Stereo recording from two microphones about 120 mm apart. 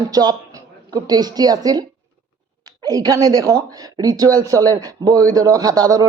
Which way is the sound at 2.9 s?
30° right (ahead or behind).